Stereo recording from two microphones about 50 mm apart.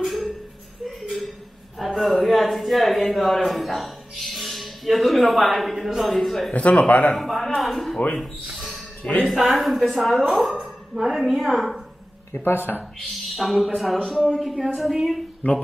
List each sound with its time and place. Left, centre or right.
0.0 s music: centre
0.8 s a sound: centre
1.8 s speech: centre
6.5 s speech: left
7.2 s speech: centre
8.2 s a sound: centre
9.3 s speech: centre
12.4 s speech: left
13.1 s speech: centre